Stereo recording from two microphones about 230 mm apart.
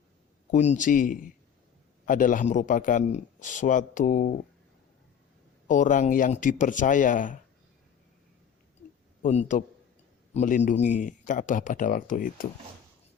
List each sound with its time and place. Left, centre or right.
0.5 s a man's voice: left
5.6 s a man's voice: left
9.2 s a man's voice: left